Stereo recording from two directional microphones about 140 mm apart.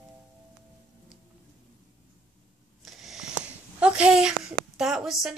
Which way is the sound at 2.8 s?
Centre (ahead or behind).